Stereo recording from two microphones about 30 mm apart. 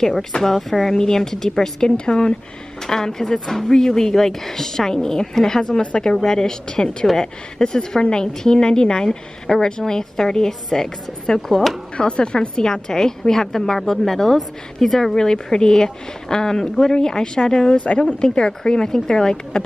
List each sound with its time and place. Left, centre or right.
0.0 s a woman's voice: centre
0.9 s a woman's voice: centre
1.9 s a woman's voice: left
2.9 s a woman's voice: centre
12.1 s a woman's voice: left; by 15.1 s centre
15.1 s a woman's voice: left
17.7 s speech: left
18.0 s a woman's voice: left